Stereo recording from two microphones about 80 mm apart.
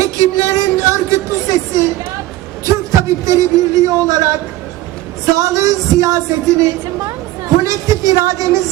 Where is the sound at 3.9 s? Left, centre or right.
Right.